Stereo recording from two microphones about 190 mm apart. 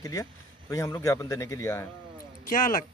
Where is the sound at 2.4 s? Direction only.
45° left (ahead or behind).